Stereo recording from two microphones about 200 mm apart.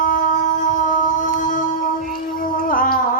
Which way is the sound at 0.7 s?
40° left (ahead or behind).